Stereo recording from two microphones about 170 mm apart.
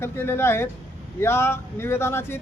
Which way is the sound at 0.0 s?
15° left (ahead or behind).